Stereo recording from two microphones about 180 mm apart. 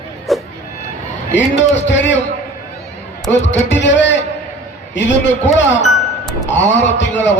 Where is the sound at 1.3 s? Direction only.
90° left.